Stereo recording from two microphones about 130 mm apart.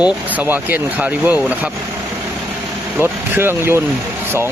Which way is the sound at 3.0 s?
15° right (ahead or behind).